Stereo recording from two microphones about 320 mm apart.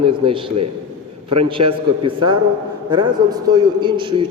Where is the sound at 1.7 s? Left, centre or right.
Centre.